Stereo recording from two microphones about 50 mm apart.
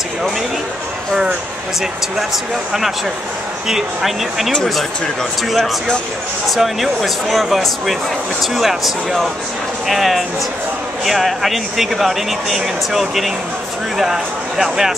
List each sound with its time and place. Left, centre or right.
3.6 s speech: centre
6.5 s speech: centre